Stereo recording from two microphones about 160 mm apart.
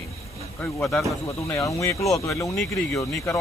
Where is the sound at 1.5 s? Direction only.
20° left (ahead or behind).